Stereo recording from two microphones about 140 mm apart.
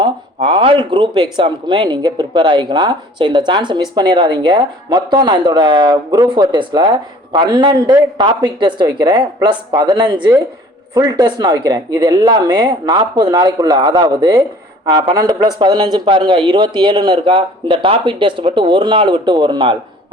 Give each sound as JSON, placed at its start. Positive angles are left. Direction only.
{"t": 0.5, "sound": "speech", "side_deg": -35}